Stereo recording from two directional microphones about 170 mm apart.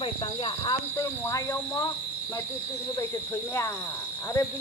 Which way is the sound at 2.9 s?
15° left (ahead or behind).